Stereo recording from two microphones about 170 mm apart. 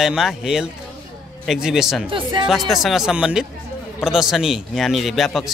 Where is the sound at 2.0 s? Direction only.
30° right (ahead or behind).